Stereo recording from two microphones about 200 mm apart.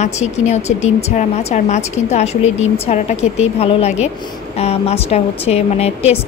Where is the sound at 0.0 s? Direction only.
35° left (ahead or behind).